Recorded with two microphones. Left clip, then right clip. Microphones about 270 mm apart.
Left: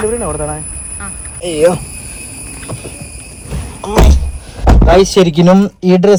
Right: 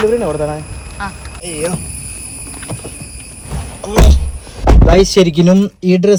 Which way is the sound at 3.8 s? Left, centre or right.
Centre.